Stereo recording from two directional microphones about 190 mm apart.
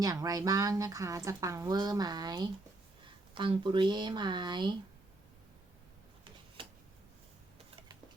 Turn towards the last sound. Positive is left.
turn(degrees=-25)  # may be behind; listen again after turning